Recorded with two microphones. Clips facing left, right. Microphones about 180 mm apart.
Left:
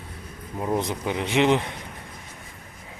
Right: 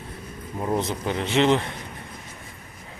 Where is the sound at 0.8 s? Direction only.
15° left (ahead or behind).